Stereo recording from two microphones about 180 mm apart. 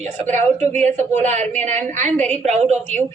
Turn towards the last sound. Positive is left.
turn(degrees=-40)  # may be behind; listen again after turning